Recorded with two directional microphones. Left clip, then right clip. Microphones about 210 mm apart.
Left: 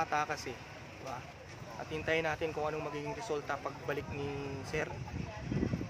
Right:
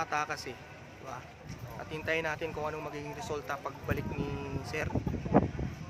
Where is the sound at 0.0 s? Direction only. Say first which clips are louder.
Even; 5° left (ahead or behind).